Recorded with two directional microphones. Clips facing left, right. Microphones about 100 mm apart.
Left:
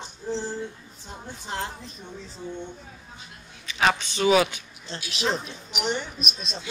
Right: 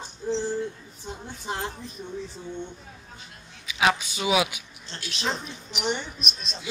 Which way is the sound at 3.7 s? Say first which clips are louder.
Even; 5° right (ahead or behind).